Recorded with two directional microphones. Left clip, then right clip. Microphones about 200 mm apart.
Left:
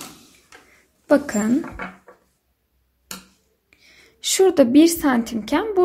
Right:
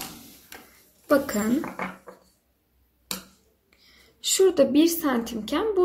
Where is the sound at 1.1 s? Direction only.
40° left (ahead or behind).